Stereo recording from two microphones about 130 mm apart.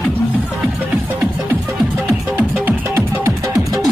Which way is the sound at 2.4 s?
15° right (ahead or behind).